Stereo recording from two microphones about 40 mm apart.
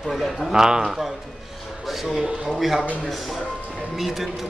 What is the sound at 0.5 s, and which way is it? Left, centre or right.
Speech, centre.